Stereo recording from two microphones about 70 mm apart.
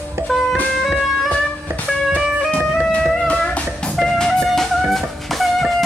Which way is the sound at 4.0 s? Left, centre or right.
Centre.